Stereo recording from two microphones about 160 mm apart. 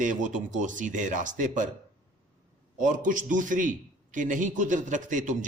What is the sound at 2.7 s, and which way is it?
A man's voice, 55° right (ahead or behind).